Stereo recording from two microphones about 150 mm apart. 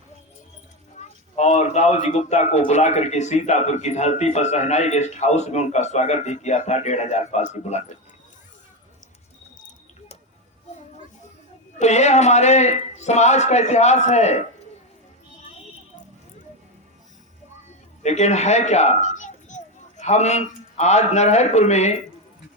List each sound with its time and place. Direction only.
0.9 s speech: 50° left (ahead or behind)
11.8 s speech: 50° left (ahead or behind)
18.0 s children playing: 50° left (ahead or behind)
20.7 s speech: 50° left (ahead or behind)